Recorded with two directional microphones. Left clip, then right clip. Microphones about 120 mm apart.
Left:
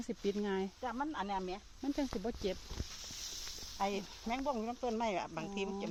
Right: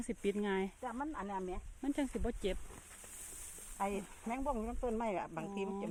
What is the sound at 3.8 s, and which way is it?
Speech, 30° right (ahead or behind).